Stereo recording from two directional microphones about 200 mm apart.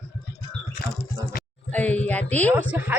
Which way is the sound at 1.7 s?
5° left (ahead or behind).